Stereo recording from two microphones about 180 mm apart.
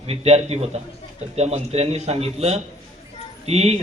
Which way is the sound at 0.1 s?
35° right (ahead or behind).